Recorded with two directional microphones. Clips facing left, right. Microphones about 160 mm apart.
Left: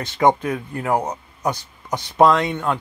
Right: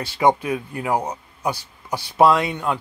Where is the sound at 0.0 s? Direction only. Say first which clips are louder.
Left 1 dB; 10° right (ahead or behind).